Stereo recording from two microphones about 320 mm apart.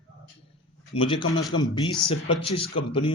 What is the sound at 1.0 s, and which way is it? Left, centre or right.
Speech, centre.